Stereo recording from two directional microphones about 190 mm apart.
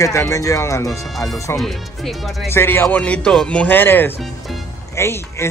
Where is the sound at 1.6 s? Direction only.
Centre (ahead or behind).